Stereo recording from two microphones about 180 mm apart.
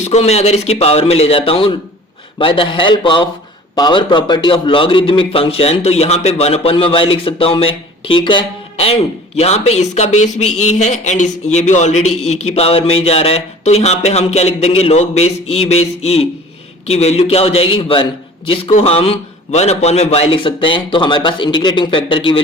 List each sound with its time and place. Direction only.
0.0 s a man's voice: 35° left (ahead or behind)